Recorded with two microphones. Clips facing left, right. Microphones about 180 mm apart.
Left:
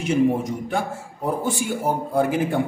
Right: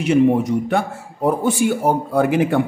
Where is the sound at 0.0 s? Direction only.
70° right (ahead or behind).